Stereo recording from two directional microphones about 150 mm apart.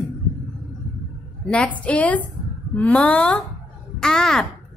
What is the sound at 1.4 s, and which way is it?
A woman's voice, 5° left (ahead or behind).